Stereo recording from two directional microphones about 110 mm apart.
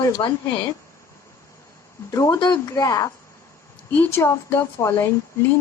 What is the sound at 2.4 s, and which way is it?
Speech, 40° left (ahead or behind).